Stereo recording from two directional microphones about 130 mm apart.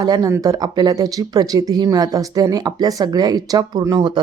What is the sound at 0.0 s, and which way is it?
Speech, 25° right (ahead or behind).